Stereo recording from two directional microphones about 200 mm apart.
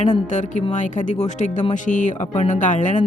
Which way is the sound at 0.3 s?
35° left (ahead or behind).